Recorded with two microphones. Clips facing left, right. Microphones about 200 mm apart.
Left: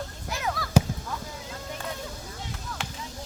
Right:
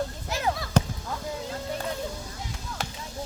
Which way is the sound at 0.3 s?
25° right (ahead or behind).